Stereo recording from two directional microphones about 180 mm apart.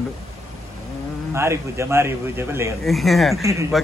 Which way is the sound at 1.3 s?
15° right (ahead or behind).